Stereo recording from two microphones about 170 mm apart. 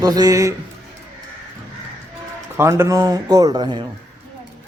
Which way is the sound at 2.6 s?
15° right (ahead or behind).